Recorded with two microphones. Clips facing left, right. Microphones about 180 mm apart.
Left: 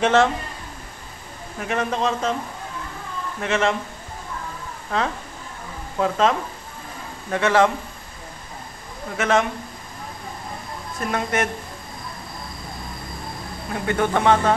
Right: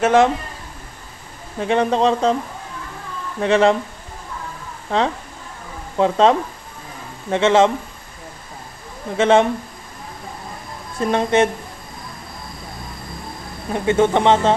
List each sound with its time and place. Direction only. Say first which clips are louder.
0.0 s a man's voice: right 3 dB; 15° right (ahead or behind)
1.6 s a man's voice: right 7 dB; 30° right (ahead or behind)
3.3 s a man's voice: right 7 dB; 35° right (ahead or behind)
4.9 s speech: right 5 dB; 25° right (ahead or behind)
9.1 s speech: right 6 dB; 30° right (ahead or behind)
11.0 s speech: right 7 dB; 25° right (ahead or behind)
13.8 s speech: right 4 dB; 25° right (ahead or behind)